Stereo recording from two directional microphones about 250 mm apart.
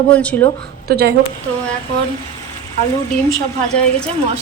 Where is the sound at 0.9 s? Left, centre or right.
Right.